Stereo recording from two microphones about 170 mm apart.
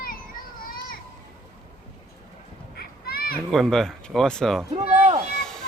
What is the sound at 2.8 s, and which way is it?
Children playing, 65° left (ahead or behind).